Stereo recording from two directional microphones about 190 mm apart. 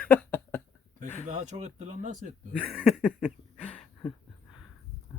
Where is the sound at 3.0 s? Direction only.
5° right (ahead or behind).